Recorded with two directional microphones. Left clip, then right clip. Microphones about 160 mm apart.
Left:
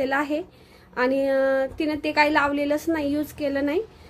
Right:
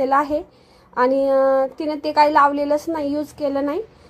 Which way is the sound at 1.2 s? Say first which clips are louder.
Right 5 dB; 15° left (ahead or behind).